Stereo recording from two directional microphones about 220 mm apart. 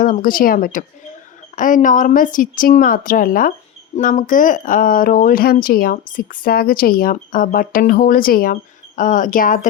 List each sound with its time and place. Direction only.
0.0 s speech: 40° left (ahead or behind)